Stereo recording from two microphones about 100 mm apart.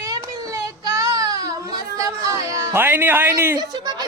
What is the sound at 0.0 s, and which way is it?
Child singing, 35° right (ahead or behind).